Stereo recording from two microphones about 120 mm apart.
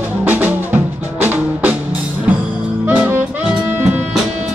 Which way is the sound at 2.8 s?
15° right (ahead or behind).